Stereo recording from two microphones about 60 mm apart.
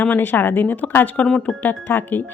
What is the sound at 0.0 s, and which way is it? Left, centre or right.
Speech, left.